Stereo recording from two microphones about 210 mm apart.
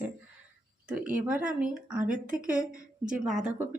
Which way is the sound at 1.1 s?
5° right (ahead or behind).